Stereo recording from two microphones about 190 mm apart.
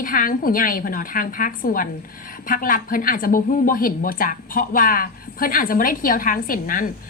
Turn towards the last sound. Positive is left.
turn(degrees=45)  # may be behind; listen again after turning